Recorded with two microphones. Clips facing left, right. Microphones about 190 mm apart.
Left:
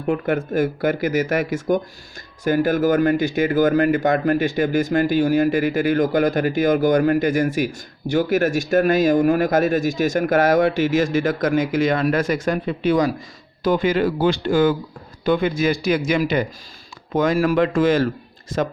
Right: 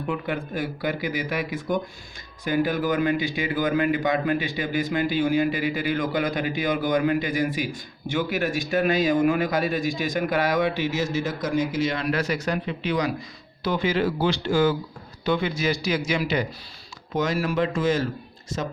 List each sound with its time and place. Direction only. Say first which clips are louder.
0.1 s a man's voice: left 9 dB; 45° left (ahead or behind)